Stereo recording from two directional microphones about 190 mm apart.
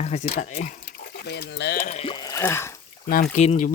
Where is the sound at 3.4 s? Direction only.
35° left (ahead or behind).